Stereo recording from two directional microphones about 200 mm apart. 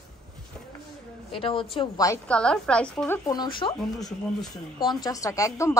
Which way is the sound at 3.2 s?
20° left (ahead or behind).